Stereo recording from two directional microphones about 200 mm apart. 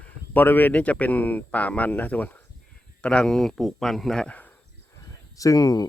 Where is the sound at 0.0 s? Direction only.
10° left (ahead or behind).